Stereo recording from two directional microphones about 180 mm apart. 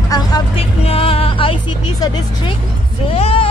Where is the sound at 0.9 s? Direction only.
30° left (ahead or behind).